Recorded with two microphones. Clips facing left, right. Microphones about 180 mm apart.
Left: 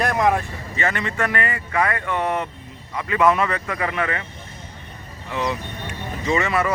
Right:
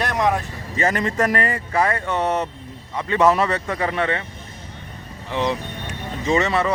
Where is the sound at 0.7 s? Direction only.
40° right (ahead or behind).